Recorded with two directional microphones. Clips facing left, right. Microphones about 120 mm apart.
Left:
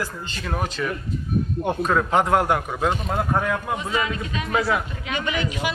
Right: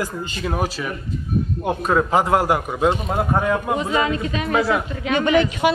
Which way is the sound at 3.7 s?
35° right (ahead or behind).